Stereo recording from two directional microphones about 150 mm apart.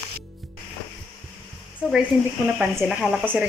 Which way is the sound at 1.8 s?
5° right (ahead or behind).